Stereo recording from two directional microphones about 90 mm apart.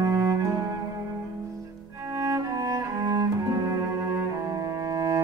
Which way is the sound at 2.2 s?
40° right (ahead or behind).